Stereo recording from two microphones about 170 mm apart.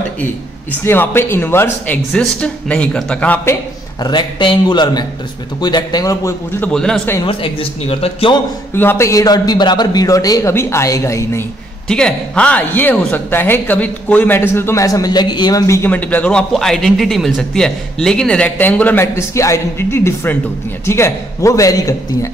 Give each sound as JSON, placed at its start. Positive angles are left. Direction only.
{"t": 0.2, "sound": "speech", "side_deg": 10}
{"t": 4.0, "sound": "a man's voice", "side_deg": 25}
{"t": 6.7, "sound": "a man's voice", "side_deg": 5}
{"t": 7.2, "sound": "a man's voice", "side_deg": 30}
{"t": 8.7, "sound": "a man's voice", "side_deg": 15}
{"t": 11.9, "sound": "a man's voice", "side_deg": 5}